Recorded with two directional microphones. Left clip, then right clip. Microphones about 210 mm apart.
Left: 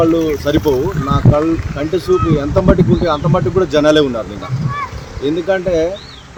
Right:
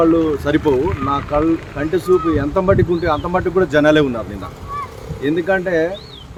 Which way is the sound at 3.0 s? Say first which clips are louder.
Left 2 dB; centre (ahead or behind).